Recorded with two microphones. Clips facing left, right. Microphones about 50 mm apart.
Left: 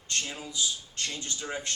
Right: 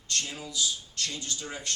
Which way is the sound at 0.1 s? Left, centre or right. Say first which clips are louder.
Even; left.